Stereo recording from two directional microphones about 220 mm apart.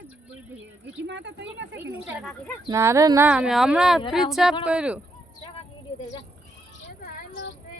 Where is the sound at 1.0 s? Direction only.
55° right (ahead or behind).